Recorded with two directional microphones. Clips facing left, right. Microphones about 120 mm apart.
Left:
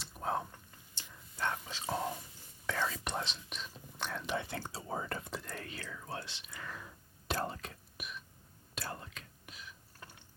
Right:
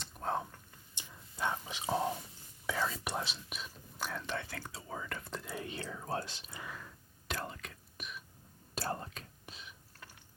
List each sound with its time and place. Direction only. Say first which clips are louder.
0.0 s whispering: even; 5° left (ahead or behind)
0.9 s whispering: right 1 dB; 15° right (ahead or behind)
4.2 s speech: left 3 dB; 15° left (ahead or behind); by 5.2 s 35° left (ahead or behind)
5.3 s whispering: even; centre (ahead or behind)
5.5 s speech: right 4 dB; 25° right (ahead or behind); by 6.5 s 40° right (ahead or behind)
7.3 s speech: left 4 dB; 35° left (ahead or behind)
7.9 s throat clearing: right 2 dB; centre (ahead or behind)
8.7 s whispering: right 5 dB; 35° right (ahead or behind)